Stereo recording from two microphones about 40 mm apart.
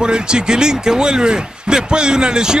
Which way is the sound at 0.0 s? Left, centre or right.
Right.